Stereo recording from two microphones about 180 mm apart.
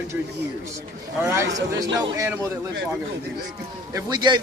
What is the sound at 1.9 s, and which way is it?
Speech, 15° right (ahead or behind).